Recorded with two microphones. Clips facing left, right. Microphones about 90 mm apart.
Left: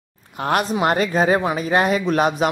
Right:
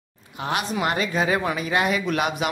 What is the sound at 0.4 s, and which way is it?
Speech, 45° left (ahead or behind).